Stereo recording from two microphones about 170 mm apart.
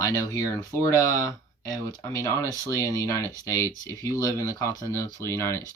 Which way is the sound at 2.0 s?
20° left (ahead or behind).